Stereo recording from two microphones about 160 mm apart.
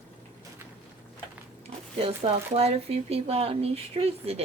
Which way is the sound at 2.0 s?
35° right (ahead or behind).